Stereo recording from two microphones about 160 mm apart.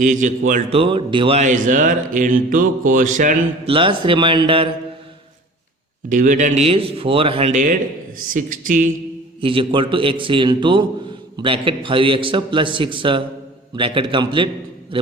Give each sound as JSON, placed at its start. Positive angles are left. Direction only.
{"t": 0.0, "sound": "a man's voice", "side_deg": -55}
{"t": 0.7, "sound": "a man's voice", "side_deg": -35}
{"t": 1.4, "sound": "mantra", "side_deg": -50}
{"t": 3.7, "sound": "a man's voice", "side_deg": -30}
{"t": 6.1, "sound": "a man's voice", "side_deg": -55}
{"t": 7.5, "sound": "mantra", "side_deg": -55}
{"t": 9.4, "sound": "a man's voice", "side_deg": -35}